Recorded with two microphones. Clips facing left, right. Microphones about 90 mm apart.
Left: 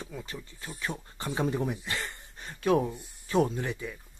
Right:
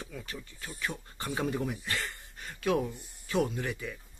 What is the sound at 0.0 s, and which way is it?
Speech, 25° left (ahead or behind).